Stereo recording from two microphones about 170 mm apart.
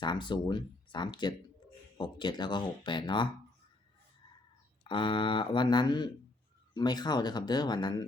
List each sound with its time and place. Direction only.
0.0 s speech: 25° left (ahead or behind)
4.8 s speech: 30° left (ahead or behind)